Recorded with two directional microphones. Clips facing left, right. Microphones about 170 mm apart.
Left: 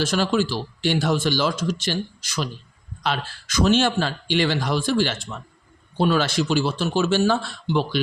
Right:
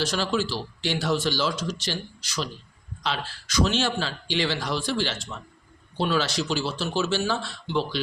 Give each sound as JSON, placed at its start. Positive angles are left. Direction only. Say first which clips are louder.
{"t": 0.0, "sound": "a man's voice", "louder": "left 4 dB", "side_deg": 50}